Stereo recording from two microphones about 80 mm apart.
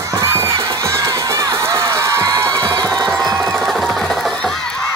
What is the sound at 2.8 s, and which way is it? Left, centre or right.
Music, centre.